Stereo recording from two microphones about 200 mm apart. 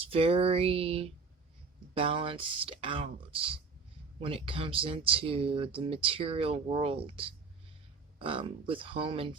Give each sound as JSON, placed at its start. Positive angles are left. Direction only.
{"t": 0.1, "sound": "speech", "side_deg": -30}